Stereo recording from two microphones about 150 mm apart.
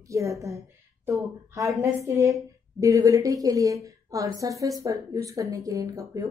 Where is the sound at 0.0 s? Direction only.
20° right (ahead or behind).